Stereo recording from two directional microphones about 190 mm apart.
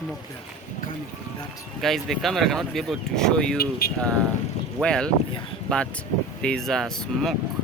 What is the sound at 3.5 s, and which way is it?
Speech, 55° left (ahead or behind).